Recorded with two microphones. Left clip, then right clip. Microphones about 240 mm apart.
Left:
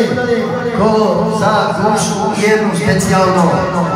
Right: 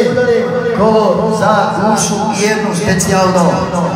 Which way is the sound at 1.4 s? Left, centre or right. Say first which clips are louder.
Right 1 dB; right.